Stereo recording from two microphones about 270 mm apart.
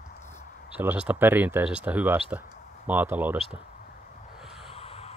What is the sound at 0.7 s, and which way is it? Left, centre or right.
Speech, centre.